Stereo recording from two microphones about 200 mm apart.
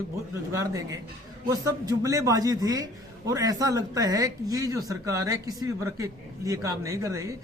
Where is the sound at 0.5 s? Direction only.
15° right (ahead or behind).